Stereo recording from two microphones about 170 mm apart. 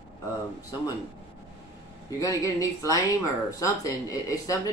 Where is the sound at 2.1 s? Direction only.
20° left (ahead or behind).